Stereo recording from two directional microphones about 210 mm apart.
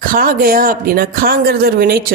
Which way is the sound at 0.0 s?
45° right (ahead or behind).